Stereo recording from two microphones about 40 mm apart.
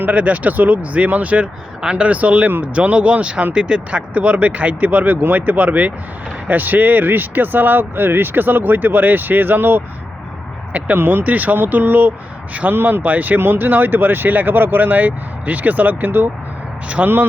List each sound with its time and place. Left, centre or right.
0.1 s speech: right
6.5 s speech: right
10.7 s speech: right
10.9 s speech: right
11.2 s speech: right
13.1 s speech: right
13.4 s speech: right
17.0 s speech: right